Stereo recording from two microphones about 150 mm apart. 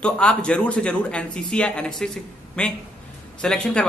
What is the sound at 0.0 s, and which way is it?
Speech, 5° left (ahead or behind).